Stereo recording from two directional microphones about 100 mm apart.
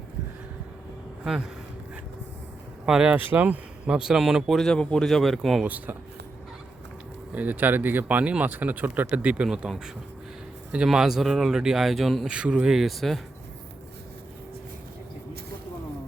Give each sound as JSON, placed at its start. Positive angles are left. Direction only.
{"t": 2.8, "sound": "speech", "side_deg": -10}
{"t": 5.6, "sound": "speech", "side_deg": -15}
{"t": 7.3, "sound": "speech", "side_deg": -15}